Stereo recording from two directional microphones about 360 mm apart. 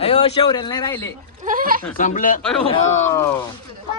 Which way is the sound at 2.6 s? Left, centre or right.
Centre.